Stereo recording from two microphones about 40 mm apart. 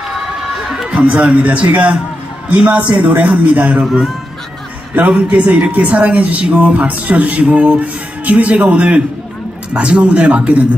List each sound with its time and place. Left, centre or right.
0.5 s a sound: centre
0.8 s music: right
3.4 s music: right
5.0 s music: right